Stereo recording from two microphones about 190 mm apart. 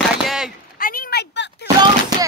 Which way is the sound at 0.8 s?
50° left (ahead or behind).